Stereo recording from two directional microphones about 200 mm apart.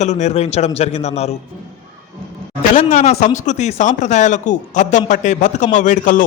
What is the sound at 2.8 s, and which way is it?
Speech, 35° left (ahead or behind).